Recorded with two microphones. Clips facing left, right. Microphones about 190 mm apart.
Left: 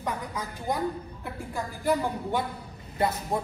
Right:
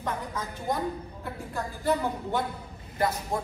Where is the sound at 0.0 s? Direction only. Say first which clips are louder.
Even; 10° left (ahead or behind).